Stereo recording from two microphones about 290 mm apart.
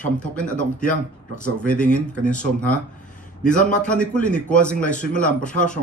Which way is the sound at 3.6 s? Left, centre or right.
Centre.